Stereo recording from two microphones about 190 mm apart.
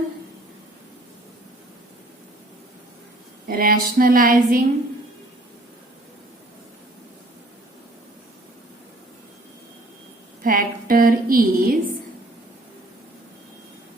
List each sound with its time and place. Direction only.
3.4 s a woman's voice: 50° right (ahead or behind)
10.4 s a woman's voice: 50° right (ahead or behind)